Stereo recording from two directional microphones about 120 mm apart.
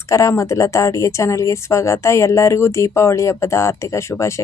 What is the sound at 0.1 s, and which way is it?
A woman's voice, 25° left (ahead or behind).